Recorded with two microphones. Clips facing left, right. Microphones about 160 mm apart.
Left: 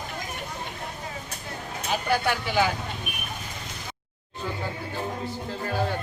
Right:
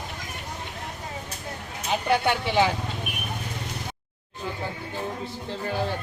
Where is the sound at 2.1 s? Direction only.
25° right (ahead or behind).